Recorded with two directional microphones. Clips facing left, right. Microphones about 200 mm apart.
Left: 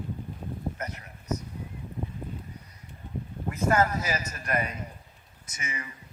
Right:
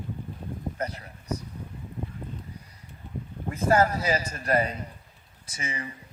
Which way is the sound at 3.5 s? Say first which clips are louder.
Right 2 dB; 30° right (ahead or behind).